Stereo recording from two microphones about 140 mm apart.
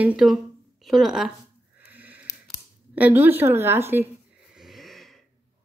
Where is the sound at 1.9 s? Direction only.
10° right (ahead or behind).